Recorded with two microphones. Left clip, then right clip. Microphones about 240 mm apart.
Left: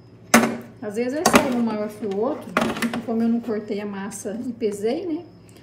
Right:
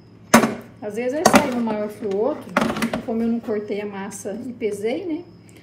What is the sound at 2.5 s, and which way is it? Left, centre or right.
Speech, right.